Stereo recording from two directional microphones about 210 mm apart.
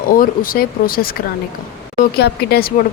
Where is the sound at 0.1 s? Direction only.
45° left (ahead or behind).